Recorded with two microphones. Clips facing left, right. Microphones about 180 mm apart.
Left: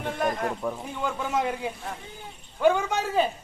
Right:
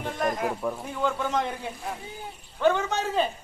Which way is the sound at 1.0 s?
10° left (ahead or behind).